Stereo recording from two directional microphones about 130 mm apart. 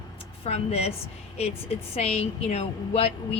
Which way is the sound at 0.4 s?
50° left (ahead or behind).